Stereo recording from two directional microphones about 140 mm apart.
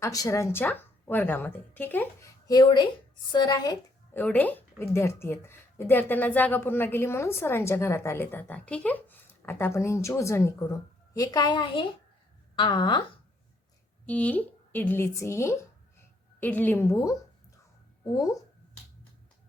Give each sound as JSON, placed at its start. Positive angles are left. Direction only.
{"t": 0.0, "sound": "a woman's voice", "side_deg": 25}
{"t": 2.5, "sound": "a woman's voice", "side_deg": 35}
{"t": 4.1, "sound": "a woman's voice", "side_deg": 10}
{"t": 14.1, "sound": "a woman's voice", "side_deg": 10}